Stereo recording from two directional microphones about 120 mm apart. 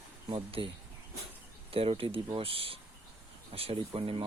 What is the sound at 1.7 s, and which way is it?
Speech, 50° right (ahead or behind).